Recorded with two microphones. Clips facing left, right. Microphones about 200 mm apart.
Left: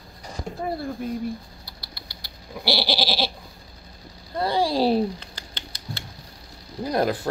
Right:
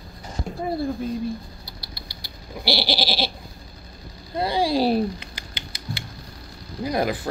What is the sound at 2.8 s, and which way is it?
Speech, 15° right (ahead or behind).